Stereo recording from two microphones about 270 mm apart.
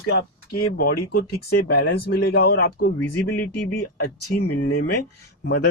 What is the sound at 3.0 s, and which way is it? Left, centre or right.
Speech, centre.